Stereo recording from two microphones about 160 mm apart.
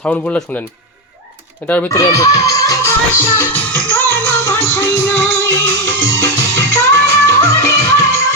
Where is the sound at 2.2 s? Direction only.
20° left (ahead or behind).